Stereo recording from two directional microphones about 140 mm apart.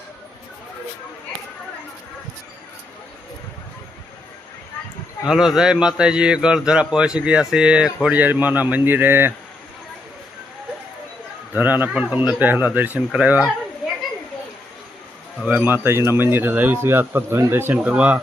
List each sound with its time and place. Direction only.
5.3 s a man's voice: 5° right (ahead or behind)
11.5 s a man's voice: 10° right (ahead or behind)
15.5 s a man's voice: 15° right (ahead or behind)